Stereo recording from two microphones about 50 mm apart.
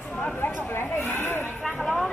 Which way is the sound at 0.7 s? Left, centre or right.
Left.